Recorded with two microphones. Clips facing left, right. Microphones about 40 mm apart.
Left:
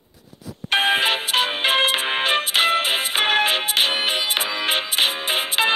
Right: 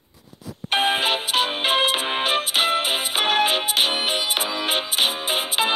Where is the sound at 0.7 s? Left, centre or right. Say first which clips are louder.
Left 2 dB; left.